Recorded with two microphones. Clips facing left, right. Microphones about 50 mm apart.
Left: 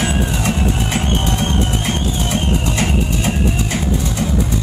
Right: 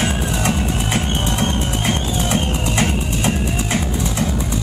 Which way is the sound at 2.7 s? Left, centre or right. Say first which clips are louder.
Left 1 dB; centre.